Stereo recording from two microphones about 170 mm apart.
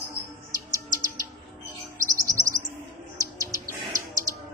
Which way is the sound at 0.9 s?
20° right (ahead or behind).